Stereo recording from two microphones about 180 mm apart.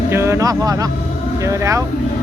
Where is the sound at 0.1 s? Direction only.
15° right (ahead or behind).